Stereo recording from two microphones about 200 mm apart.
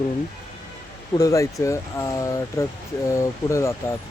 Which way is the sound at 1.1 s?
15° left (ahead or behind).